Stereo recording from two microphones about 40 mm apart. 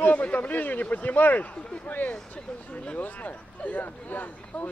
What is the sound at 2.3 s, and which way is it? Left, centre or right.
Speech, left.